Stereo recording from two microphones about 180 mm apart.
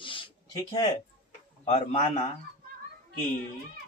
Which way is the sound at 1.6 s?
40° left (ahead or behind).